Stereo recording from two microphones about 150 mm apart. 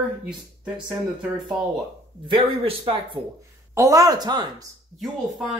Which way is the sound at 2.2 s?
35° right (ahead or behind).